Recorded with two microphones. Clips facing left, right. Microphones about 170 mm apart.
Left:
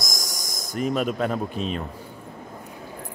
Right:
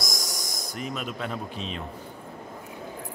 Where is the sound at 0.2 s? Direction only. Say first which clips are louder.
Even; 45° left (ahead or behind).